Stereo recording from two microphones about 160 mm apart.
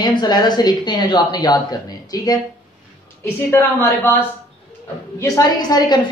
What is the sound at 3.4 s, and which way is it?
Speech, 15° left (ahead or behind).